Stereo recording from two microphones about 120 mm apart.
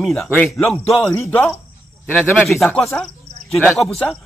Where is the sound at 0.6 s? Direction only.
25° left (ahead or behind).